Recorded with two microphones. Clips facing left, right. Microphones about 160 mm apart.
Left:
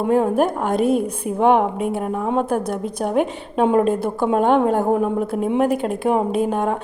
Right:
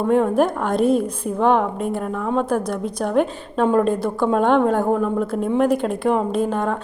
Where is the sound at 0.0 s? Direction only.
10° left (ahead or behind).